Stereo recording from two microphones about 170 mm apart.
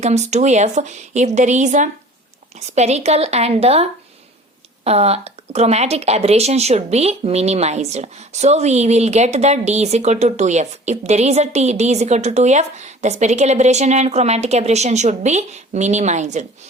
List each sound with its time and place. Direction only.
0.0 s speech: 40° right (ahead or behind)